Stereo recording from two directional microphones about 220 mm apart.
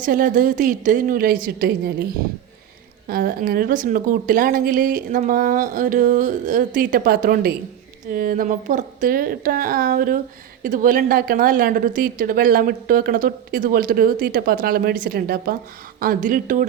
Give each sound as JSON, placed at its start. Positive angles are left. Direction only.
{"t": 0.0, "sound": "a woman's voice", "side_deg": -40}
{"t": 3.1, "sound": "a woman's voice", "side_deg": -40}